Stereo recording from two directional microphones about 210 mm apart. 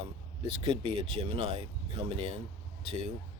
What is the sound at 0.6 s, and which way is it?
Speech, 25° right (ahead or behind).